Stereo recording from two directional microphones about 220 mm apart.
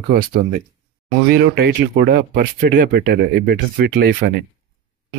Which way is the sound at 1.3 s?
45° right (ahead or behind).